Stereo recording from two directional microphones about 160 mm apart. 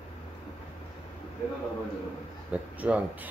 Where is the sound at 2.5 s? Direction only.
10° right (ahead or behind).